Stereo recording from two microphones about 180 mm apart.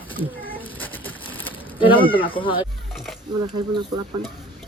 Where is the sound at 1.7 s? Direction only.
30° left (ahead or behind).